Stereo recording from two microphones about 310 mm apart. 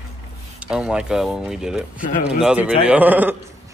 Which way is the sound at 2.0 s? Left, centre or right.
Left.